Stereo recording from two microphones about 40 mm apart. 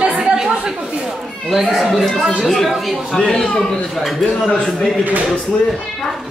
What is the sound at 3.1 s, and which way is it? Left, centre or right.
Speech, centre.